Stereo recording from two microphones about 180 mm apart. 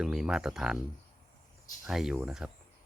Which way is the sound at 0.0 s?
5° right (ahead or behind).